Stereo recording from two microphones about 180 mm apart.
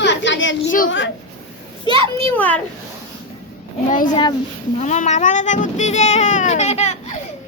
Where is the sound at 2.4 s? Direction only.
10° left (ahead or behind).